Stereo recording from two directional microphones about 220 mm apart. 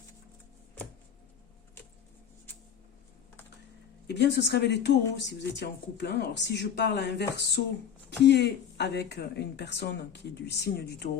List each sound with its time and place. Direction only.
4.0 s speech: 50° left (ahead or behind)